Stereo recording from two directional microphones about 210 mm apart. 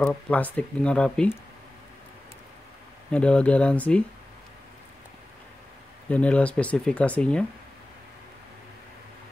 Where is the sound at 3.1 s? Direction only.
5° left (ahead or behind).